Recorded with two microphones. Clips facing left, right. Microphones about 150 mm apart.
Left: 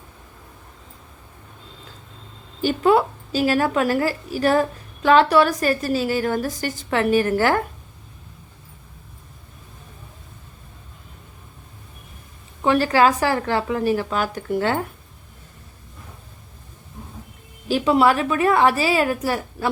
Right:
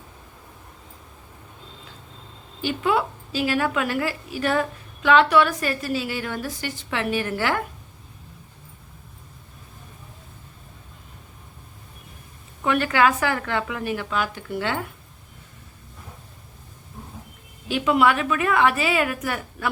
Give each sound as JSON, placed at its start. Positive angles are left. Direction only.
{"t": 2.6, "sound": "a woman's voice", "side_deg": 40}
{"t": 12.6, "sound": "a woman's voice", "side_deg": 35}
{"t": 17.7, "sound": "a woman's voice", "side_deg": 35}